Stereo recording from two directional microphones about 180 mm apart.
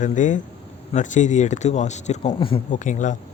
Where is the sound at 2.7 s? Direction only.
45° left (ahead or behind).